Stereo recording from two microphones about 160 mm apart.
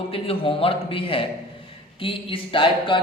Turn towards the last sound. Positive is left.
turn(degrees=35)  # may be behind; listen again after turning